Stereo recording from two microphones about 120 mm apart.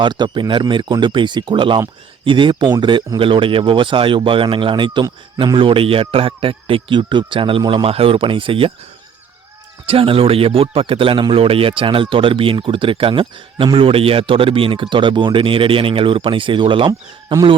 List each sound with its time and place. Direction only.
0.0 s speech: 40° right (ahead or behind)
9.8 s speech: 50° right (ahead or behind)